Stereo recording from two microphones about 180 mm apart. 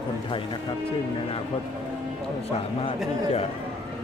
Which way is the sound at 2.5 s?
35° left (ahead or behind).